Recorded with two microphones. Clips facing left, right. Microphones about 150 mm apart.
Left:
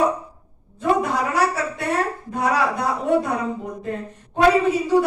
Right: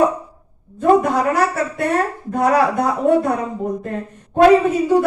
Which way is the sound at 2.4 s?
50° right (ahead or behind).